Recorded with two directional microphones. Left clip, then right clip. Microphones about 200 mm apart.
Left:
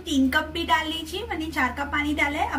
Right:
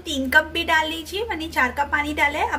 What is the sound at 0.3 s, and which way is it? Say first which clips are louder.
A woman's voice: right 9 dB; 55° right (ahead or behind).